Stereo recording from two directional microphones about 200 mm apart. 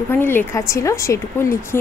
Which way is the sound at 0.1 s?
10° left (ahead or behind).